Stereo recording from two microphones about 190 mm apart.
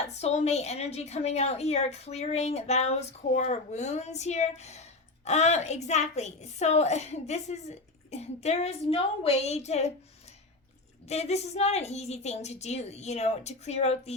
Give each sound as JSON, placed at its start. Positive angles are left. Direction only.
{"t": 0.1, "sound": "a woman's voice", "side_deg": 35}
{"t": 11.1, "sound": "a woman's voice", "side_deg": 35}